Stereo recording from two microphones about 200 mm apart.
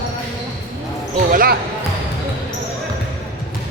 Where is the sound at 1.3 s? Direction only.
45° right (ahead or behind).